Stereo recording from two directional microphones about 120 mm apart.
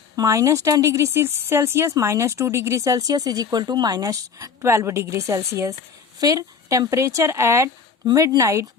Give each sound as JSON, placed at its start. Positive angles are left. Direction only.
{"t": 0.2, "sound": "speech", "side_deg": -25}